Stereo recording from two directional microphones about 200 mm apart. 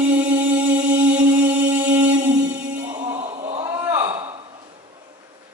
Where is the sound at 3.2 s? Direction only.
30° right (ahead or behind).